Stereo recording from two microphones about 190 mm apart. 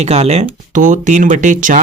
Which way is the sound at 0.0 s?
35° right (ahead or behind).